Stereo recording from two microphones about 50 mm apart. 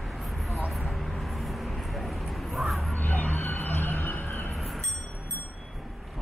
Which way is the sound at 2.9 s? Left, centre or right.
Left.